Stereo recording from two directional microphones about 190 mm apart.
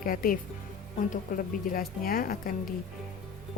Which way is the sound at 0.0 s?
50° left (ahead or behind).